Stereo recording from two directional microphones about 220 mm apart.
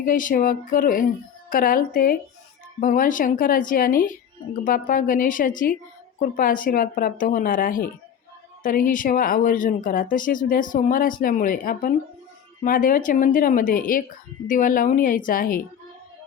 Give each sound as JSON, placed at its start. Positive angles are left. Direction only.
{"t": 0.0, "sound": "speech", "side_deg": 35}